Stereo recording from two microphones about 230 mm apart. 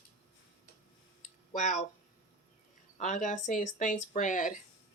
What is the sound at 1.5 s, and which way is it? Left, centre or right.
Speech, left.